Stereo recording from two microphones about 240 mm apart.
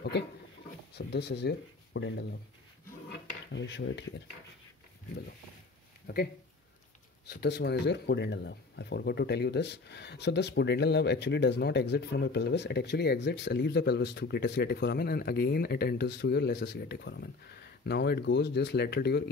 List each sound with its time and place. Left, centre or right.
0.9 s speech: left
3.5 s speech: left
6.1 s speech: left
7.2 s speech: left